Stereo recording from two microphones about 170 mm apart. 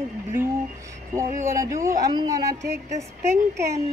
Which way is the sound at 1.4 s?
20° right (ahead or behind).